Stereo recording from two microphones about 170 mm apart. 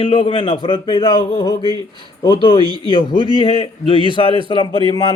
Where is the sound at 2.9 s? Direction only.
30° left (ahead or behind).